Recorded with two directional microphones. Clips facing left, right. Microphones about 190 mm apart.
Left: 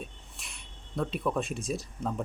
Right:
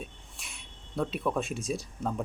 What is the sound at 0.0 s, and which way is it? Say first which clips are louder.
Speech: even; centre (ahead or behind).